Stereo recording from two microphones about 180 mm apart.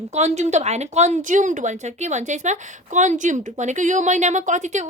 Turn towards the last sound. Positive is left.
turn(degrees=-40)  # may be behind; listen again after turning